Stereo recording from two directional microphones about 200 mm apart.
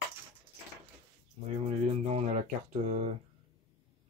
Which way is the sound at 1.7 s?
35° right (ahead or behind).